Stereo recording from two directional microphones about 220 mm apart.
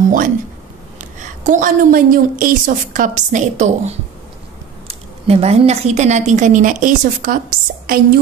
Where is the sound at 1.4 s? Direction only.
35° right (ahead or behind).